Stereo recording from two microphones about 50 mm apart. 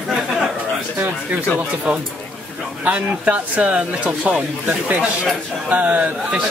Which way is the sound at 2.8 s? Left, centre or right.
Right.